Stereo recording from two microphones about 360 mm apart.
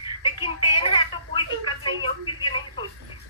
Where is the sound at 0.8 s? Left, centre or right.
Centre.